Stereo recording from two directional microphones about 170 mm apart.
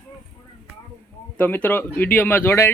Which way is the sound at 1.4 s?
10° left (ahead or behind).